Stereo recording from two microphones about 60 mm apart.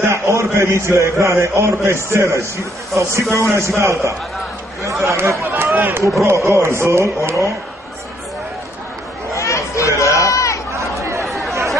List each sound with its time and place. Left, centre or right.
0.1 s a man's voice: right
5.8 s speech: right
6.2 s speech: right
9.3 s chatter: left
11.0 s chatter: right
11.2 s chatter: centre